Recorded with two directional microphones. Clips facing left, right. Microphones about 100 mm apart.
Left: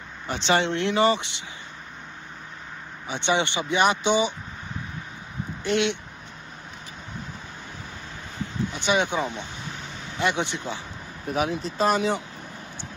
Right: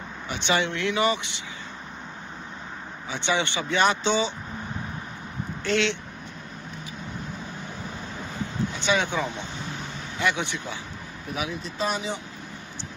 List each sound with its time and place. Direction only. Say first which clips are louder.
0.3 s speech: left 3 dB; 35° left (ahead or behind)
3.1 s speech: left 2 dB; 20° left (ahead or behind)
5.6 s speech: left 1 dB; 20° left (ahead or behind)
8.7 s speech: left 2 dB; 20° left (ahead or behind)
11.3 s speech: left 6 dB; 40° left (ahead or behind)